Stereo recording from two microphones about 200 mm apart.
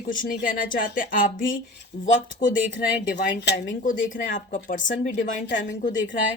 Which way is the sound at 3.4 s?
55° left (ahead or behind).